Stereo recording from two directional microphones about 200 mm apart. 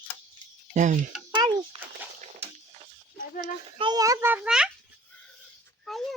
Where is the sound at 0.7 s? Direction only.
40° right (ahead or behind).